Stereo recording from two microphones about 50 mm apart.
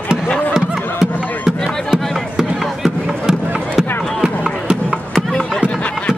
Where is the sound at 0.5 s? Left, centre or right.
Centre.